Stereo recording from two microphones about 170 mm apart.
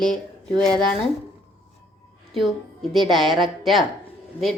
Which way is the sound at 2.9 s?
Centre (ahead or behind).